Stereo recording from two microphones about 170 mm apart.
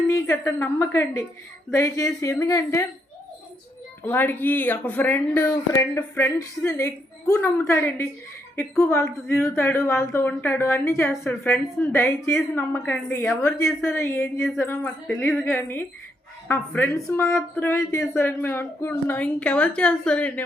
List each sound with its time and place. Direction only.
0.1 s speech: 15° left (ahead or behind)
4.0 s speech: 10° left (ahead or behind)